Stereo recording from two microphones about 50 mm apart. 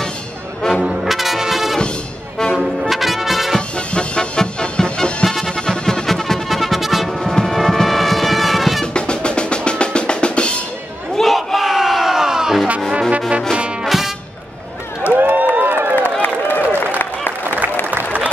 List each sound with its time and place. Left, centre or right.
0.6 s music: centre
1.0 s music: centre
3.5 s music: centre
8.9 s drum: centre
11.1 s crowd: centre
13.8 s music: centre
15.1 s run: right
16.0 s run: left
17.0 s a sound: left